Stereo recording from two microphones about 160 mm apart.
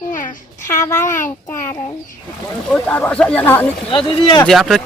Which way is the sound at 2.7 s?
10° left (ahead or behind).